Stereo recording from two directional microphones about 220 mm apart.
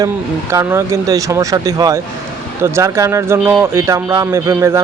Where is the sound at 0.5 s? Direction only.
10° right (ahead or behind).